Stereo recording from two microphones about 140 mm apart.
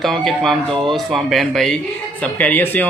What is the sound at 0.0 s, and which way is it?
Speech, centre (ahead or behind).